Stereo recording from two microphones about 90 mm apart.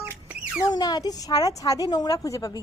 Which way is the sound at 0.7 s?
45° left (ahead or behind).